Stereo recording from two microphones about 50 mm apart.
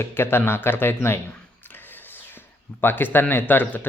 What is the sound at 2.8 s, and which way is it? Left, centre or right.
Speech, left.